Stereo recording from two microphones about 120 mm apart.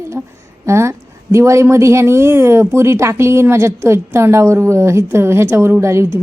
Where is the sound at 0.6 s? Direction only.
25° right (ahead or behind).